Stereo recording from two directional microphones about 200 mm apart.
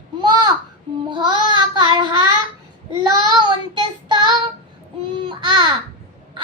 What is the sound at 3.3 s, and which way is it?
Child singing, 20° right (ahead or behind).